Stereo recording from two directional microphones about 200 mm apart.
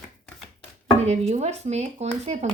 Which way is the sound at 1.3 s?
35° right (ahead or behind).